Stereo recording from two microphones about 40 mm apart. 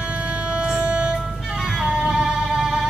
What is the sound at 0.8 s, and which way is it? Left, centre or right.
Music, right.